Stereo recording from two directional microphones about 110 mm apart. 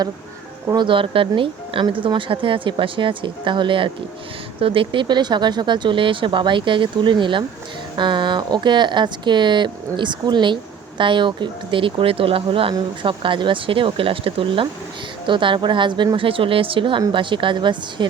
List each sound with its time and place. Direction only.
0.7 s speech: 45° right (ahead or behind)